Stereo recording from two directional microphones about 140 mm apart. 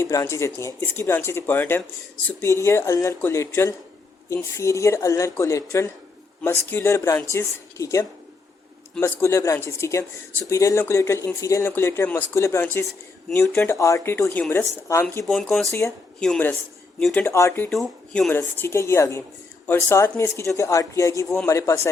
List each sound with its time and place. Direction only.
0.0 s speech: 20° left (ahead or behind)
15.2 s speech: centre (ahead or behind); by 17.7 s 20° left (ahead or behind)
17.7 s speech: centre (ahead or behind)
18.3 s speech: 15° left (ahead or behind)